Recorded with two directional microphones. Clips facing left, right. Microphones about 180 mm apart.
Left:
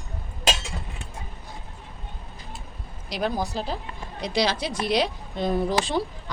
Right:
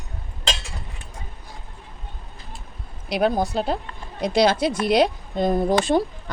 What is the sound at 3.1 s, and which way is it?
Speech, 60° right (ahead or behind).